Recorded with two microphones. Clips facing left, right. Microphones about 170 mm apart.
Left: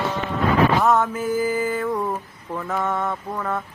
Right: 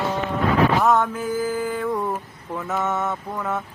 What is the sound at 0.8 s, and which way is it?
Male singing, centre (ahead or behind).